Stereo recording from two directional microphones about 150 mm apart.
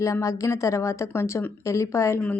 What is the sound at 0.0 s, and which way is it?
A woman's voice, 20° left (ahead or behind).